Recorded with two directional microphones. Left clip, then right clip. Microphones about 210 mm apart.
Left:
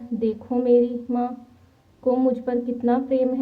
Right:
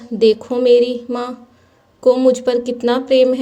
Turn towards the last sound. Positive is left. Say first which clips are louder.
# right 9 dB
turn(degrees=-30)  # may be behind; listen again after turning